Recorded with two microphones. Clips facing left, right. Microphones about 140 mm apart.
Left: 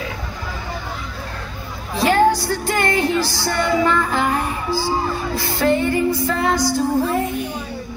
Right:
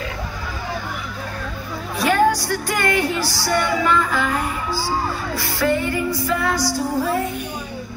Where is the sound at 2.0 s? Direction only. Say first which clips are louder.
Left 2 dB; 25° left (ahead or behind).